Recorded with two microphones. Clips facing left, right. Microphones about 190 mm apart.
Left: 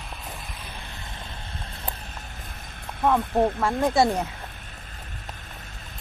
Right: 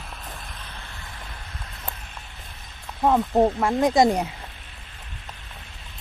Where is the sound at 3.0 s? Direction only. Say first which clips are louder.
Right 2 dB; 15° right (ahead or behind).